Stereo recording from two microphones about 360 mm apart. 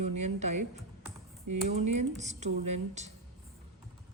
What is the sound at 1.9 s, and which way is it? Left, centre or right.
Speech, centre.